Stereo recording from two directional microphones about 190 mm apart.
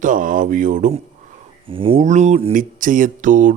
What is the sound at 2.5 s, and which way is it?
Speech, 45° right (ahead or behind).